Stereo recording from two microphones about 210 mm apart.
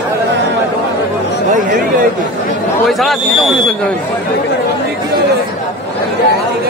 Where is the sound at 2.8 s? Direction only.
Centre (ahead or behind).